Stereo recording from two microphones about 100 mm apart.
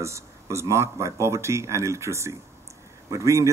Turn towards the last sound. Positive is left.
turn(degrees=-30)  # may be behind; listen again after turning